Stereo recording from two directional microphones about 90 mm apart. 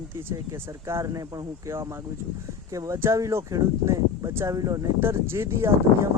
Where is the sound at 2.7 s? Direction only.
40° right (ahead or behind).